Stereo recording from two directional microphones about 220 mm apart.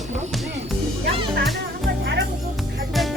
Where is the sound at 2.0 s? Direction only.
55° right (ahead or behind).